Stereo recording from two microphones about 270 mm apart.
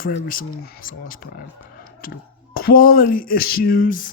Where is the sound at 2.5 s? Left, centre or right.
Left.